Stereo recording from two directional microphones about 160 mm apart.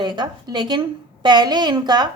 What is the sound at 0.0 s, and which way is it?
A woman's voice, 30° right (ahead or behind).